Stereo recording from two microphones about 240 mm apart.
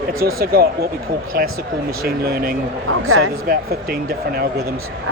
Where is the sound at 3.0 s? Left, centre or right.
Right.